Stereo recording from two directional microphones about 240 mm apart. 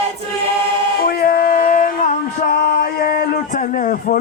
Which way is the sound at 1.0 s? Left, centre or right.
Left.